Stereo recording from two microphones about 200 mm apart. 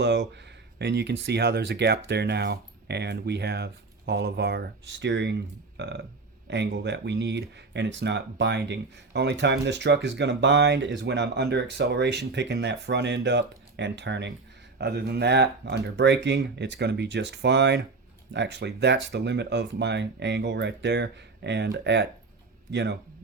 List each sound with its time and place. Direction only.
0.8 s speech: 55° right (ahead or behind)